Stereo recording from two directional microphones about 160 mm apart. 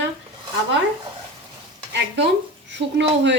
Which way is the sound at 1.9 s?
90° right.